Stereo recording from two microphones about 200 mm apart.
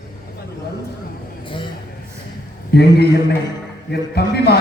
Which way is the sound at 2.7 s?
55° left (ahead or behind).